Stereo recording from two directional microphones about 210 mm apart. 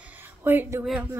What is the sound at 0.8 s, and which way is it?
Speech, centre (ahead or behind).